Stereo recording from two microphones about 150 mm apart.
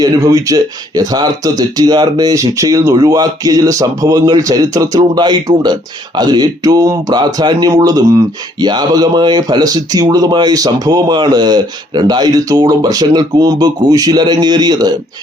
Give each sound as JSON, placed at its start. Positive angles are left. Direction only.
{"t": 0.0, "sound": "speech", "side_deg": -25}